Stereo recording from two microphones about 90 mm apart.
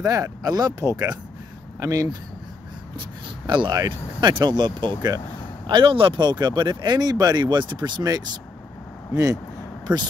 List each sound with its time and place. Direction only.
0.0 s speech: 40° right (ahead or behind)
0.7 s speech: 35° right (ahead or behind)
3.4 s speech: 60° right (ahead or behind)
9.1 s speech: 40° right (ahead or behind)
9.9 s speech: 15° right (ahead or behind)